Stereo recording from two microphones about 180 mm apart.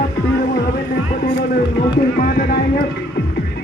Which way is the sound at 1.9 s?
55° left (ahead or behind).